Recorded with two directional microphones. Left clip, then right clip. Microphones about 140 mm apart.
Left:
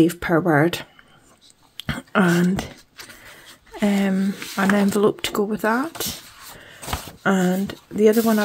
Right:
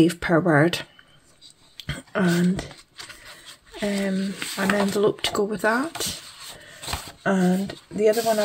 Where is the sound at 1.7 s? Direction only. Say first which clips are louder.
Left 6 dB; 50° left (ahead or behind).